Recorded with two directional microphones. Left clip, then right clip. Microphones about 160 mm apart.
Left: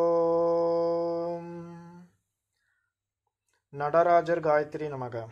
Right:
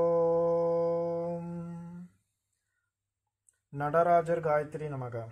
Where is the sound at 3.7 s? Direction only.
25° left (ahead or behind).